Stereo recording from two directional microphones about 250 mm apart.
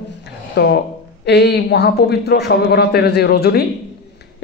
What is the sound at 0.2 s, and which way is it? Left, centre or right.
A woman's voice, left.